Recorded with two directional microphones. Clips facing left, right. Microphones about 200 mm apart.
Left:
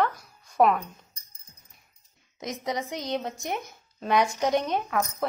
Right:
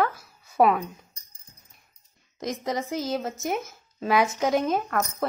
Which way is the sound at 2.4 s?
Centre (ahead or behind).